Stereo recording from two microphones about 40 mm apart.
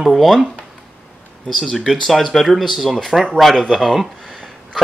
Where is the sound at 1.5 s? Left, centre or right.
Centre.